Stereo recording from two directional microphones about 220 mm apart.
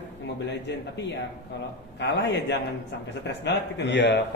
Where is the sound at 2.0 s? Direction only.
50° left (ahead or behind).